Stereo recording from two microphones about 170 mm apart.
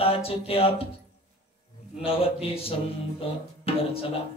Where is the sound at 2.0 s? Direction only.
35° left (ahead or behind).